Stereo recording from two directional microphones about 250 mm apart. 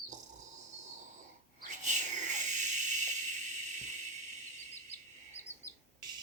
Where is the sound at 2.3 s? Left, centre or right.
Right.